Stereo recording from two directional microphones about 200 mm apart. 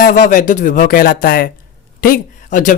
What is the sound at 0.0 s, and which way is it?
Speech, 40° left (ahead or behind).